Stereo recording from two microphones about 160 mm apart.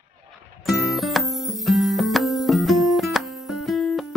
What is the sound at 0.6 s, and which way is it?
Music, centre (ahead or behind).